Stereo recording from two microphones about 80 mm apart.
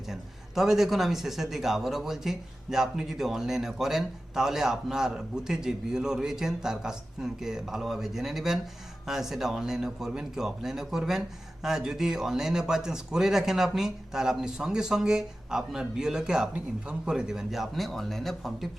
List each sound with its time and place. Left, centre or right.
0.1 s speech: centre